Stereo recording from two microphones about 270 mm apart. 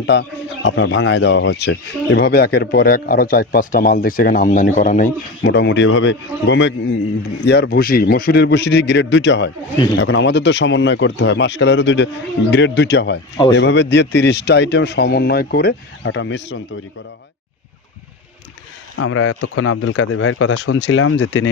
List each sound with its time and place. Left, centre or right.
0.0 s a man's voice: left
18.9 s speech: left